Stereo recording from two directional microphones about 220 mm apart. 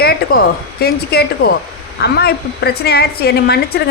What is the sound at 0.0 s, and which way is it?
A woman's voice, 45° left (ahead or behind).